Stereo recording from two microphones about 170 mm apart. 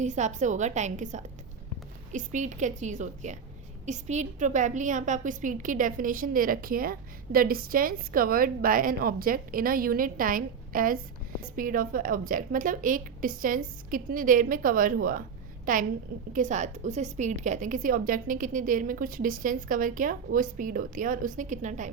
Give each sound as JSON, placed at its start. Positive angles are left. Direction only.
{"t": 0.0, "sound": "a woman's voice", "side_deg": -45}